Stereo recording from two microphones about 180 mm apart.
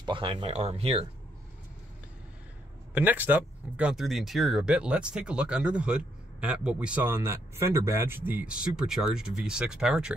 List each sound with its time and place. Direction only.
0.0 s speech: 30° right (ahead or behind)
2.9 s speech: 10° right (ahead or behind)